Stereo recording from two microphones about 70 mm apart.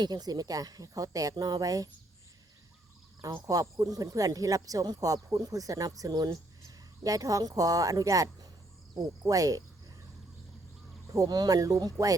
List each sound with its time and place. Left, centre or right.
0.0 s speech: right
3.2 s speech: right
11.1 s speech: right